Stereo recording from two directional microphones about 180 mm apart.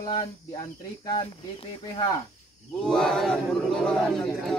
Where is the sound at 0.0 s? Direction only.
25° left (ahead or behind).